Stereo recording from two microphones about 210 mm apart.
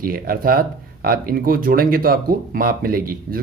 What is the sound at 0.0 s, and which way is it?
Speech, 45° right (ahead or behind).